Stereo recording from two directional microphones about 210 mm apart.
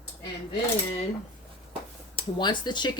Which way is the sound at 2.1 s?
20° left (ahead or behind).